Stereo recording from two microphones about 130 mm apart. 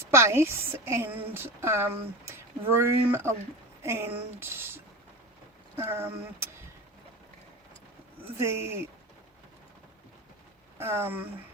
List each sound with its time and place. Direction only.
0.0 s a woman's voice: 20° right (ahead or behind)
8.4 s a woman's voice: 20° right (ahead or behind)
10.8 s speech: 20° right (ahead or behind)